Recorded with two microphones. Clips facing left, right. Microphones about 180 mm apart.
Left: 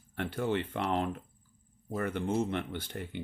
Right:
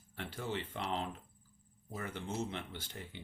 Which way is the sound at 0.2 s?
60° left (ahead or behind).